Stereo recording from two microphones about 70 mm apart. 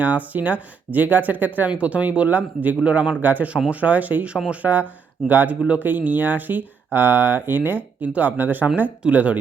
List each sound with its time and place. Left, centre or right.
0.0 s speech: right